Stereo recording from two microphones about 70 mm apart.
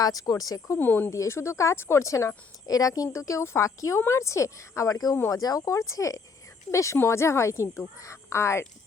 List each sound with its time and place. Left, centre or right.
0.0 s speech: left
0.8 s speech: left
1.1 s speech: left